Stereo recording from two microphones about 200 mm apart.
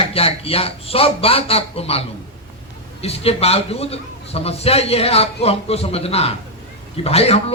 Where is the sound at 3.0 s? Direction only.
30° left (ahead or behind).